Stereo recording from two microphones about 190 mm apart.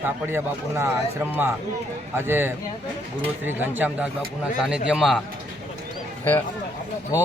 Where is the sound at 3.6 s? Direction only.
10° right (ahead or behind).